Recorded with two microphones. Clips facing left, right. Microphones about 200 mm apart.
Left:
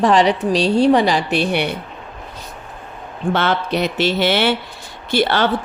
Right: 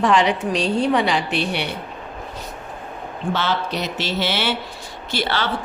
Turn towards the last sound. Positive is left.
turn(degrees=50)  # may be behind; listen again after turning